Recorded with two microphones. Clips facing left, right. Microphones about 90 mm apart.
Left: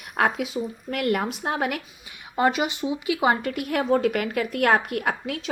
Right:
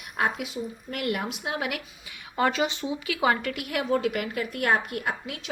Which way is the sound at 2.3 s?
20° left (ahead or behind).